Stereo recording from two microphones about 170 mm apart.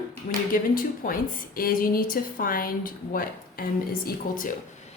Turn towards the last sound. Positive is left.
turn(degrees=55)  # may be behind; listen again after turning